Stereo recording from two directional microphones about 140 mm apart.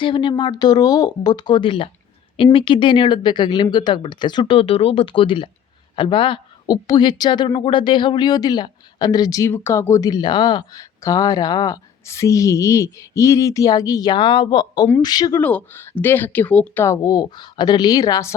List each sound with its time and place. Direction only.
0.0 s speech: 35° left (ahead or behind)
15.4 s speech: 10° left (ahead or behind)